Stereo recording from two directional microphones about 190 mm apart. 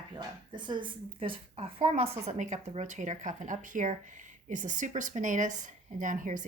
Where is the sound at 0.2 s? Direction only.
25° right (ahead or behind).